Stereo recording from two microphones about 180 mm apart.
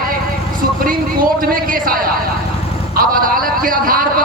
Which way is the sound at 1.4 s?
50° right (ahead or behind).